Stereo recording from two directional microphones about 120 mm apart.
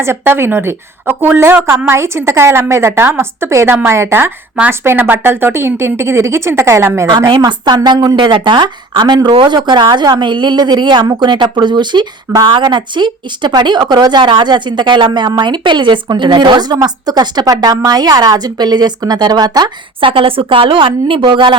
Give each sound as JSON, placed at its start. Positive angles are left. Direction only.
{"t": 0.0, "sound": "a woman's voice", "side_deg": -20}
{"t": 7.3, "sound": "speech", "side_deg": -40}